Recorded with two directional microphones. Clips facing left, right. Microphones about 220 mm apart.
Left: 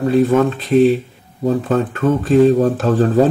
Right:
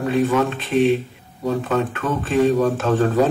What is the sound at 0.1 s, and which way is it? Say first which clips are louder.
Speech: left 5 dB; 35° left (ahead or behind).